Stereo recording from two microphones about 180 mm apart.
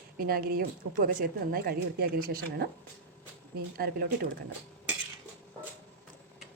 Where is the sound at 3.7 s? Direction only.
55° right (ahead or behind).